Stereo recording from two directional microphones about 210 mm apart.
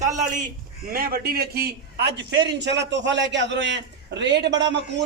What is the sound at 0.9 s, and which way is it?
A man's voice, 45° right (ahead or behind).